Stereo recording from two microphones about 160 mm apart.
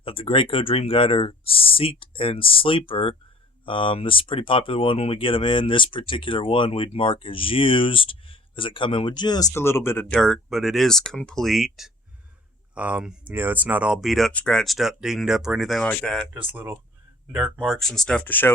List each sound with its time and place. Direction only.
0.0 s speech: 35° left (ahead or behind); by 15.9 s centre (ahead or behind)
15.9 s speech: 10° left (ahead or behind)
16.5 s speech: 10° right (ahead or behind); by 18.5 s 10° left (ahead or behind)